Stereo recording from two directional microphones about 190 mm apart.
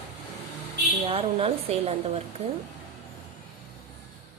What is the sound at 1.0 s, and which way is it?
A woman's voice, 30° right (ahead or behind).